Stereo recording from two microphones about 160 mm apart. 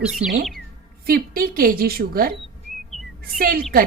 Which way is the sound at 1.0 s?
65° right (ahead or behind).